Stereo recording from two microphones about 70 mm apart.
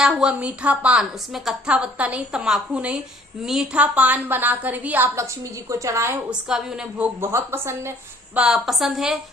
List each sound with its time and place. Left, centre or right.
0.0 s a woman's voice: centre
5.1 s a woman's voice: right
6.5 s a woman's voice: centre
7.2 s speech: right
8.4 s a woman's voice: centre